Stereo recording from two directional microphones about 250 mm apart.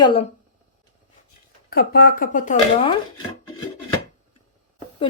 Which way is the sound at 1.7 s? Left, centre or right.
Left.